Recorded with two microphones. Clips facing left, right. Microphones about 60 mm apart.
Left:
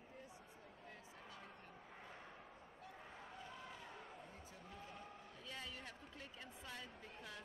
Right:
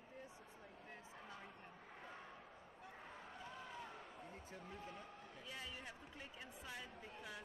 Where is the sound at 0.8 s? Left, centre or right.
Right.